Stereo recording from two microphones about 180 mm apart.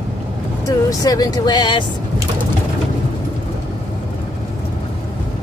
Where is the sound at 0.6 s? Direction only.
20° left (ahead or behind).